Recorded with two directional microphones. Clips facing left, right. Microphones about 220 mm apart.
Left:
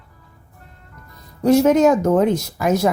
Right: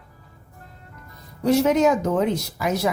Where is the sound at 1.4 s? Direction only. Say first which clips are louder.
Left 4 dB; 45° left (ahead or behind).